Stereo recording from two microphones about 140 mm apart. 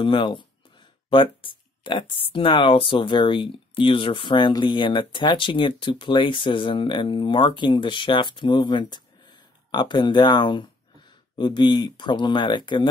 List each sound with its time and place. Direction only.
0.0 s speech: 35° left (ahead or behind)